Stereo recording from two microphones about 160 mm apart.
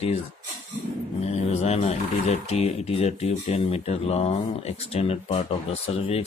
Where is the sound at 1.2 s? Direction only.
40° left (ahead or behind).